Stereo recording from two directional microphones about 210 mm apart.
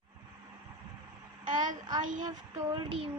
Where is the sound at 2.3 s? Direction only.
15° right (ahead or behind).